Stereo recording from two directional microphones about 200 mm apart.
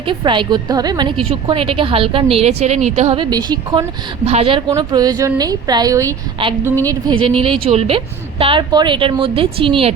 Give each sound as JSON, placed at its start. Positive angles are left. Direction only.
{"t": 0.0, "sound": "a woman's voice", "side_deg": -25}